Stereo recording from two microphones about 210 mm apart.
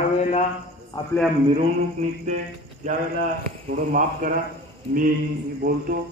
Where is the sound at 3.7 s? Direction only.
40° right (ahead or behind).